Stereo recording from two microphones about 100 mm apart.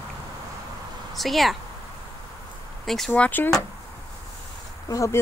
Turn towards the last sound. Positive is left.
turn(degrees=30)  # may be behind; listen again after turning